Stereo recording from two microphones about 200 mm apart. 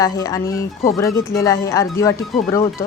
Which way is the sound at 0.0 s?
15° left (ahead or behind).